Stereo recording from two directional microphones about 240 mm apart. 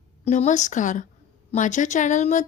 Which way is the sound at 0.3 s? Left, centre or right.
Left.